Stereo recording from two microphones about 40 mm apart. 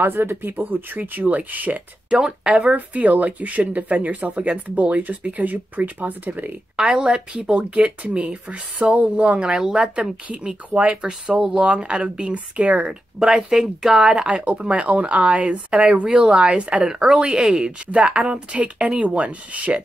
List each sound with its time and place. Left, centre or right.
0.0 s speech: right
0.6 s speech: right
2.0 s speech: right
2.7 s speech: right
6.8 s speech: right
7.4 s speech: right
10.2 s speech: right
13.2 s speech: centre
14.2 s speech: right
16.9 s speech: centre
17.9 s speech: right